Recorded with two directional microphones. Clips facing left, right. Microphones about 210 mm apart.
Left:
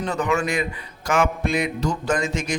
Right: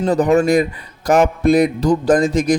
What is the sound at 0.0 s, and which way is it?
A man's voice, 35° right (ahead or behind).